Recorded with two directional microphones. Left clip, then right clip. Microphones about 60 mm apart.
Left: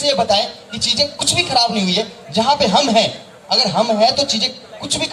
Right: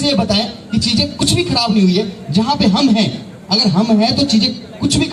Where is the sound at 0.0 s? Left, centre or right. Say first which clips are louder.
Left 1 dB; left.